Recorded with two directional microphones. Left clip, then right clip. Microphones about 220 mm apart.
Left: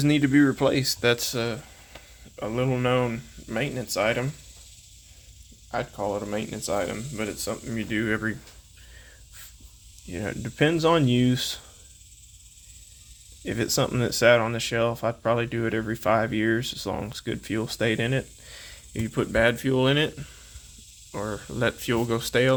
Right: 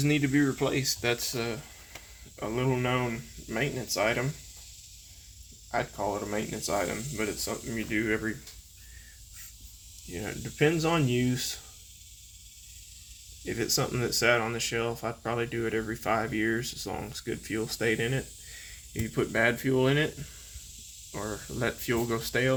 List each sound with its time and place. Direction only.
0.0 s speech: 50° left (ahead or behind); by 4.3 s 30° left (ahead or behind)
5.7 s speech: 30° left (ahead or behind)
10.1 s speech: 50° left (ahead or behind)
13.4 s speech: 50° left (ahead or behind)